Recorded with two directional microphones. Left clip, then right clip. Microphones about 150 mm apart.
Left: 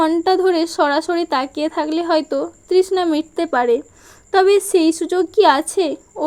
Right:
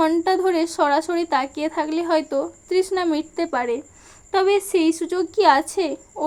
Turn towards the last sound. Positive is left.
turn(degrees=35)  # may be behind; listen again after turning